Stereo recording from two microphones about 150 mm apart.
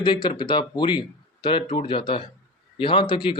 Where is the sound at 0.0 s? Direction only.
30° left (ahead or behind).